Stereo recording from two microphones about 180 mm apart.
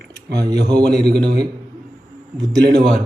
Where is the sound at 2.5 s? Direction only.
65° right (ahead or behind).